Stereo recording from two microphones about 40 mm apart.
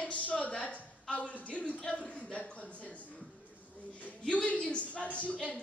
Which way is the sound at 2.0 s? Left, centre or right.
Left.